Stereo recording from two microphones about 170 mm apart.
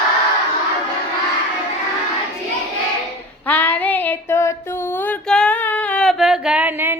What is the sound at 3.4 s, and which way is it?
Female singing, 10° left (ahead or behind).